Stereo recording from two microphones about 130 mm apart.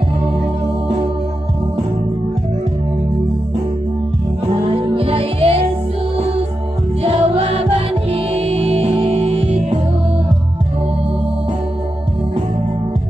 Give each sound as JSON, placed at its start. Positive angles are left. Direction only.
{"t": 4.7, "sound": "music", "side_deg": -45}